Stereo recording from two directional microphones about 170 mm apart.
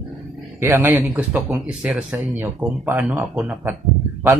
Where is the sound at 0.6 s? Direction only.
15° right (ahead or behind).